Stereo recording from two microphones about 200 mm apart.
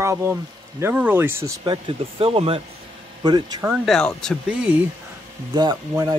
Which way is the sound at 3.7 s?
Centre (ahead or behind).